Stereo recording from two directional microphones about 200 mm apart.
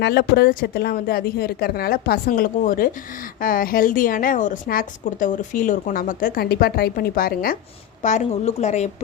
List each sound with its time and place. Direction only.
0.0 s a woman's voice: 55° left (ahead or behind)
8.0 s a woman's voice: 35° left (ahead or behind)